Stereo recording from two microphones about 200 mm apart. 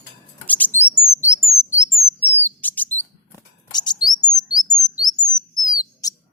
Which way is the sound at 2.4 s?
10° left (ahead or behind).